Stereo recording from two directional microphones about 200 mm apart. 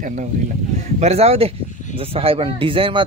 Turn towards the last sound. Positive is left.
turn(degrees=-25)  # may be behind; listen again after turning